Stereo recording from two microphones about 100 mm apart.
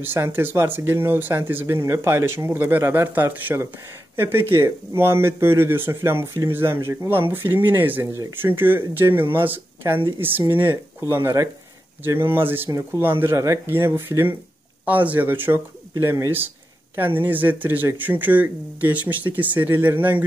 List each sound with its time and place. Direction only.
0.0 s speech: 20° right (ahead or behind)